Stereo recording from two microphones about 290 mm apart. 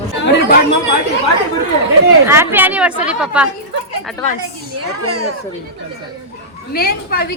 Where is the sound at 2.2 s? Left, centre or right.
Centre.